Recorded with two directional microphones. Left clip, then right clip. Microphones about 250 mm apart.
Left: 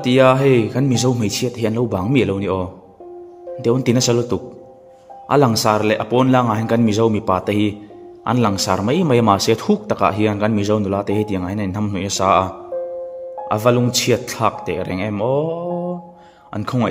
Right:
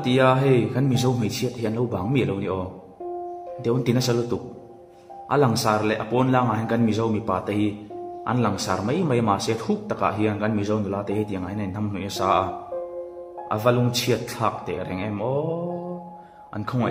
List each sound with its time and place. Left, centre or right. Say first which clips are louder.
0.0 s speech: left 6 dB; left
3.6 s speech: left 7 dB; left
13.5 s speech: left 5 dB; left